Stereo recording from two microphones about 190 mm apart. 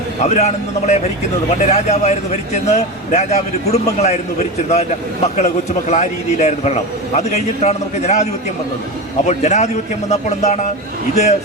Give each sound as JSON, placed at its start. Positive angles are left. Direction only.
{"t": 0.2, "sound": "a man's voice", "side_deg": 35}